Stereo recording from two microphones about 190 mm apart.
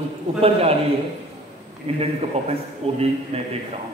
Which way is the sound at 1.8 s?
30° right (ahead or behind).